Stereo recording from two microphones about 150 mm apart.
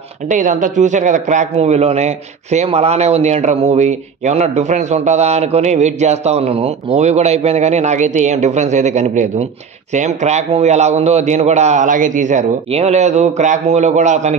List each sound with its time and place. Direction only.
0.3 s a man's voice: 60° right (ahead or behind)